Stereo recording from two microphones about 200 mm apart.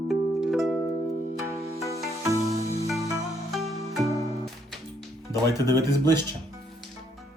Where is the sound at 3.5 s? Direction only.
Centre (ahead or behind).